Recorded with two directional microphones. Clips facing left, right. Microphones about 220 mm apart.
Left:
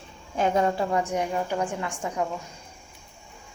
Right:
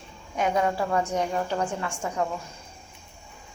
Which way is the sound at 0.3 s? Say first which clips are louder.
Left 1 dB; 30° left (ahead or behind).